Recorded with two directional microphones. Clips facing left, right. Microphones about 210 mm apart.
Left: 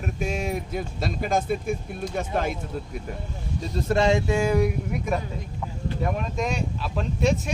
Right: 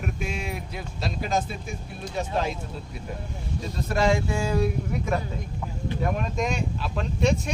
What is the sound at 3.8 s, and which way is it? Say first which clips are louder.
Speech: left 2 dB; 25° left (ahead or behind).